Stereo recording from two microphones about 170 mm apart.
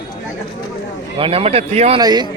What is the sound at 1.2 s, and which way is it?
Speech, 35° right (ahead or behind).